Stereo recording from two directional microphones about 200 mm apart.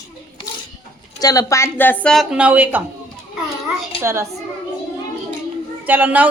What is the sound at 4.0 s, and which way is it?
Speech, 15° right (ahead or behind).